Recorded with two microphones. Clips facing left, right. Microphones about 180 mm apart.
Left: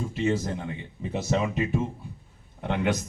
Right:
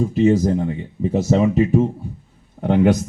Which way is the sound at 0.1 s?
40° right (ahead or behind).